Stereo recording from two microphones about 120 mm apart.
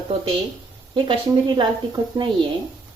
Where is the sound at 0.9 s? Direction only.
40° right (ahead or behind).